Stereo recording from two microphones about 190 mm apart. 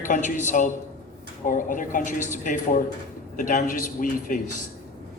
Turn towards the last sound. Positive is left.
turn(degrees=40)  # may be behind; listen again after turning